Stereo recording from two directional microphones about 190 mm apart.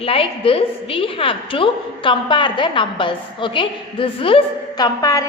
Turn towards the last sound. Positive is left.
turn(degrees=20)  # may be behind; listen again after turning